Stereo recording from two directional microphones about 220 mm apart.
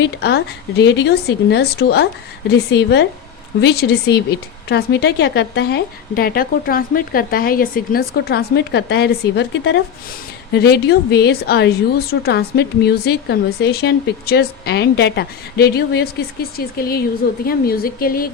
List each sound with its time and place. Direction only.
0.0 s a woman's voice: 50° left (ahead or behind)